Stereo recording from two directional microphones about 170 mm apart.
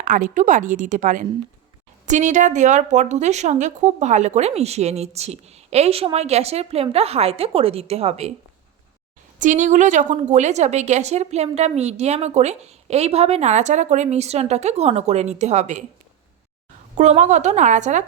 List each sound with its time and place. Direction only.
0.0 s a woman's voice: 50° right (ahead or behind)
9.4 s a woman's voice: 50° right (ahead or behind)
17.0 s a woman's voice: 45° right (ahead or behind)